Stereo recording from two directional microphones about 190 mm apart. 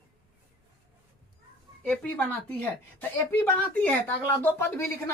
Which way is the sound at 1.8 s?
5° left (ahead or behind).